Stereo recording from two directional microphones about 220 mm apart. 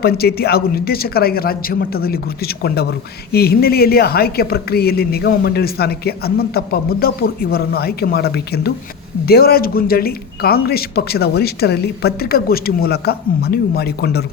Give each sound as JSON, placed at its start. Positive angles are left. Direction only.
{"t": 0.0, "sound": "speech", "side_deg": 45}